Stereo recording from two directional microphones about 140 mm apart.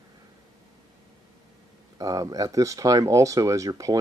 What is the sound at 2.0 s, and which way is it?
Speech, 25° right (ahead or behind).